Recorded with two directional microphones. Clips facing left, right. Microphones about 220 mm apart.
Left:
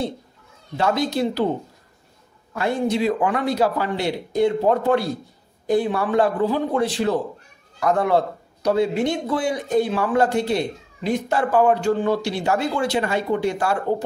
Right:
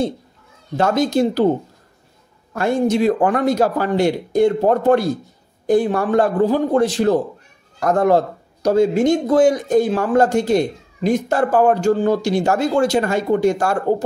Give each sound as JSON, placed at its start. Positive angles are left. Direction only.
{"t": 0.7, "sound": "speech", "side_deg": -45}
{"t": 2.5, "sound": "speech", "side_deg": -45}